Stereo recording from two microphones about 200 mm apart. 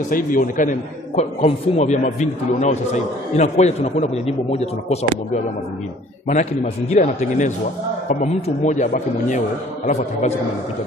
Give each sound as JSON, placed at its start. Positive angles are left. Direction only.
{"t": 0.1, "sound": "a man's voice", "side_deg": 40}